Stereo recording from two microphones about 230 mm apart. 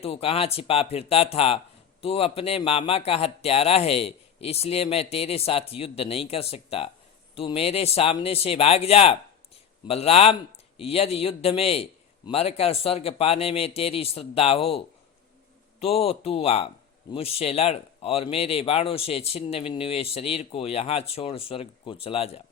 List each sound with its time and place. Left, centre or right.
0.0 s speech: left